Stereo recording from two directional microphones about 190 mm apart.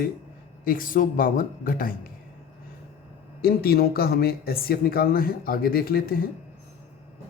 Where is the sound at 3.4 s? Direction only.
55° left (ahead or behind).